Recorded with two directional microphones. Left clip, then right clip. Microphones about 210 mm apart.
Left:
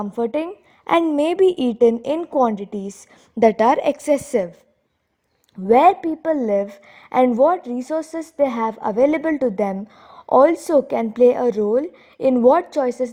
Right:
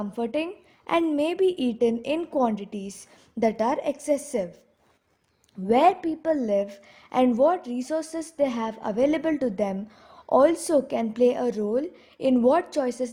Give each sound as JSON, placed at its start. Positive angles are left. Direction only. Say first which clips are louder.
{"t": 0.0, "sound": "a woman's voice", "louder": "left 6 dB", "side_deg": 35}
{"t": 5.6, "sound": "a woman's voice", "louder": "left 6 dB", "side_deg": 35}